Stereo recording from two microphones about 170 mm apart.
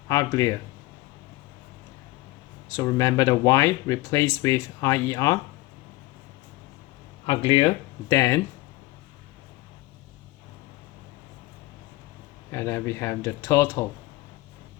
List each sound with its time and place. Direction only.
0.1 s speech: 20° left (ahead or behind)
2.6 s speech: 20° left (ahead or behind)
7.3 s speech: 30° left (ahead or behind)
8.0 s speech: 15° left (ahead or behind)
12.5 s speech: 15° left (ahead or behind)